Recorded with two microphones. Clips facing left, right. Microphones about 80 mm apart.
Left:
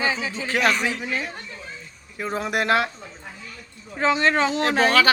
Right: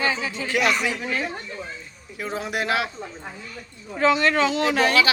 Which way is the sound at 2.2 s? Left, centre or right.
Left.